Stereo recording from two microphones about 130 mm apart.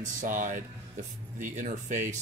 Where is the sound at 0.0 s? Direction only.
90° right.